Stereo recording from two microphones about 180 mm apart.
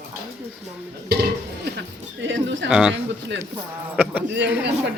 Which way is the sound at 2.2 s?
80° right.